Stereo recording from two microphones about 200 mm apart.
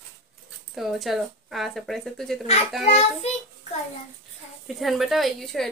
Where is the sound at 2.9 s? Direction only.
30° left (ahead or behind).